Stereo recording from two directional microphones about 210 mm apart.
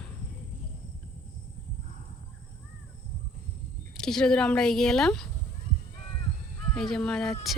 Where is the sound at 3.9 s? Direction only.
5° left (ahead or behind).